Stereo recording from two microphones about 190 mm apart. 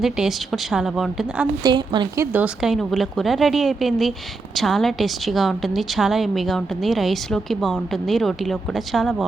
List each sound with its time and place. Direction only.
0.0 s a woman's voice: centre (ahead or behind)
1.6 s a woman's voice: 25° right (ahead or behind)
2.2 s a woman's voice: 10° right (ahead or behind)